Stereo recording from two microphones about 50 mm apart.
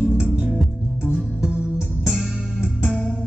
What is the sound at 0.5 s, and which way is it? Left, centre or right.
Music, centre.